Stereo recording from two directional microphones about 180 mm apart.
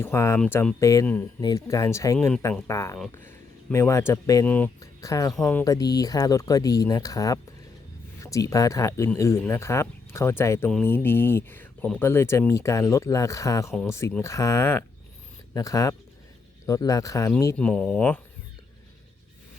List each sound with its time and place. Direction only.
0.0 s speech: 15° left (ahead or behind)
0.8 s speech: 15° left (ahead or behind)
2.1 s speech: 5° left (ahead or behind)
2.6 s speech: 15° left (ahead or behind)
5.6 s speech: 20° left (ahead or behind)